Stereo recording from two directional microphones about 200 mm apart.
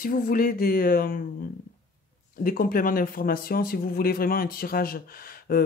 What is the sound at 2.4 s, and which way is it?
Speech, 45° left (ahead or behind).